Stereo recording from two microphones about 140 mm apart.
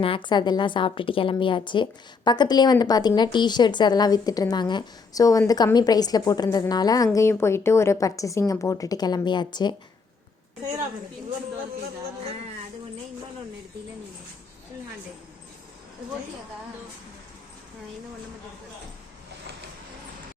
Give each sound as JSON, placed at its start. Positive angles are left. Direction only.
{"t": 0.0, "sound": "a woman's voice", "side_deg": 35}